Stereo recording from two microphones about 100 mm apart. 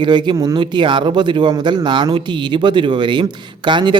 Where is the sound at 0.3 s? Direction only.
40° right (ahead or behind).